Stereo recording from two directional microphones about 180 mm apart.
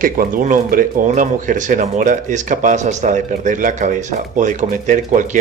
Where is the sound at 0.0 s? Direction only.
50° right (ahead or behind).